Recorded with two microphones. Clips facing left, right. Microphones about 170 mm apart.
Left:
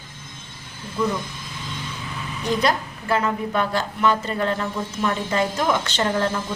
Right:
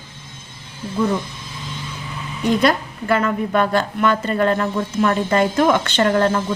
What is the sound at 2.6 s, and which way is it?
A woman's voice, 60° right (ahead or behind).